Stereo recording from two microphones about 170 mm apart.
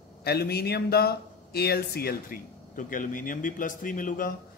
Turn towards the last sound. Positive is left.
turn(degrees=55)  # may be behind; listen again after turning